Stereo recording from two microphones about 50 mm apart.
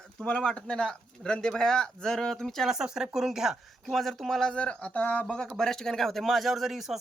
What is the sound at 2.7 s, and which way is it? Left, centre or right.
Speech, centre.